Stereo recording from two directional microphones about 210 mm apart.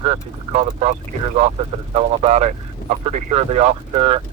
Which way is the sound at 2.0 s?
35° right (ahead or behind).